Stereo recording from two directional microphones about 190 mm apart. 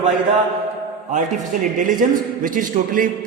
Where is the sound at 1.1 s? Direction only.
40° right (ahead or behind).